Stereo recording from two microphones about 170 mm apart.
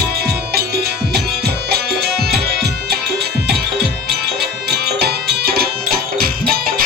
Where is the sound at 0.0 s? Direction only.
70° right (ahead or behind).